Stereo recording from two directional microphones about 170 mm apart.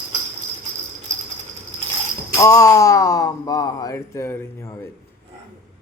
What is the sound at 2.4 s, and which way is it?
Speech, 20° left (ahead or behind).